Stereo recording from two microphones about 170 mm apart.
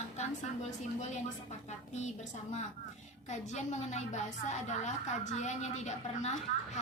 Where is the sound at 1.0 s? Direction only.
45° left (ahead or behind).